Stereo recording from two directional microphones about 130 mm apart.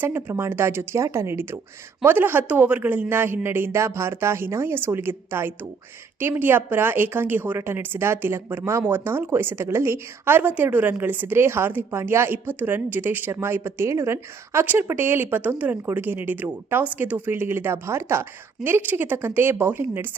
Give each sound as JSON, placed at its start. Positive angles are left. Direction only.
{"t": 0.0, "sound": "speech", "side_deg": -15}